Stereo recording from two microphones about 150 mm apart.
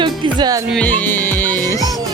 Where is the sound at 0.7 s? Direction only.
10° left (ahead or behind).